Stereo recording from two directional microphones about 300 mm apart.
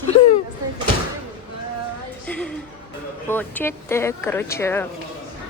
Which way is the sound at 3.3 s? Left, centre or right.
Centre.